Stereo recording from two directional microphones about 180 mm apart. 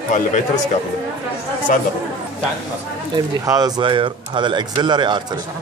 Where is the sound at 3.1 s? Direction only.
20° right (ahead or behind).